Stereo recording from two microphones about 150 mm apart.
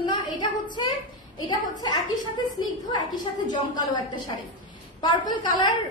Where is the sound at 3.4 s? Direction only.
30° left (ahead or behind).